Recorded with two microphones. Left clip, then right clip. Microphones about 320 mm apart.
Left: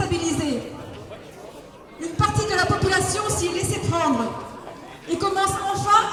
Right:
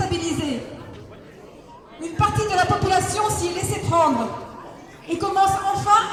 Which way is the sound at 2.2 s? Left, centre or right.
Centre.